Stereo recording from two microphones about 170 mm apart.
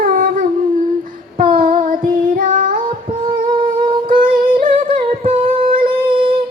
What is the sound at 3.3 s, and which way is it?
Humming, 55° right (ahead or behind).